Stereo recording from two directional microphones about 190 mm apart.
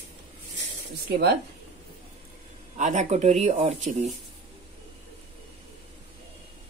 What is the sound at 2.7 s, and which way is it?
Speech, 40° right (ahead or behind).